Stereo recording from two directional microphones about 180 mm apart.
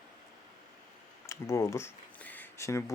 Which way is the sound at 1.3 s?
15° left (ahead or behind).